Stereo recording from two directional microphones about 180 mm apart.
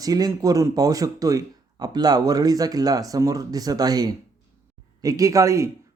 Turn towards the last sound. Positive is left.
turn(degrees=-15)  # may be behind; listen again after turning